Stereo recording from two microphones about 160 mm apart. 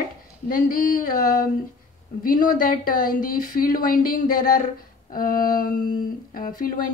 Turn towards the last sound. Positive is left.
turn(degrees=60)  # may be behind; listen again after turning